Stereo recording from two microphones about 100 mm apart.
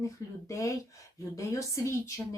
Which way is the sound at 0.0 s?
30° left (ahead or behind).